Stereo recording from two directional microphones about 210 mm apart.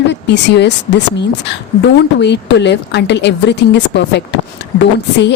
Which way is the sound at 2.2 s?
55° left (ahead or behind).